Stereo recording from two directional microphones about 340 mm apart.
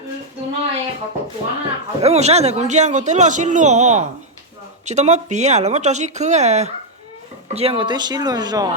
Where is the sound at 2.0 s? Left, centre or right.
Centre.